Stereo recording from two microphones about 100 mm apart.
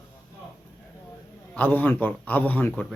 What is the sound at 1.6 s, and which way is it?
A man's voice, 15° left (ahead or behind).